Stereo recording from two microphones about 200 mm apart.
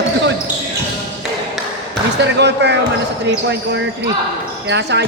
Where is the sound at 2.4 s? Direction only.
60° right (ahead or behind).